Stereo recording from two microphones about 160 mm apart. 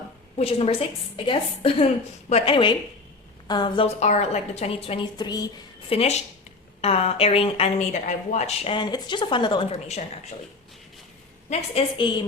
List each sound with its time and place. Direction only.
0.3 s a woman's voice: 35° left (ahead or behind)
4.0 s a woman's voice: 45° left (ahead or behind); by 5.5 s 25° left (ahead or behind)
5.9 s a woman's voice: 40° left (ahead or behind)
11.4 s a woman's voice: 40° left (ahead or behind)